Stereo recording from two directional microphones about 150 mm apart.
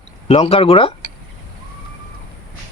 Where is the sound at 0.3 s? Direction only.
40° left (ahead or behind).